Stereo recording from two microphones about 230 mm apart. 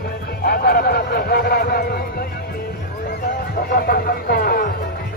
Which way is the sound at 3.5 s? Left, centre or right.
Left.